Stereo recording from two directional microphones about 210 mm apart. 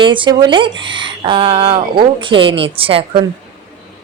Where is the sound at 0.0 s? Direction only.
25° right (ahead or behind).